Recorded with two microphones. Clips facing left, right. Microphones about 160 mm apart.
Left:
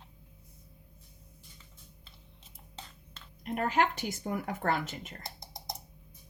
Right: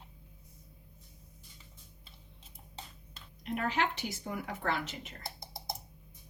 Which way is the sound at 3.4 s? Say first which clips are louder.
Left 4 dB; 45° left (ahead or behind).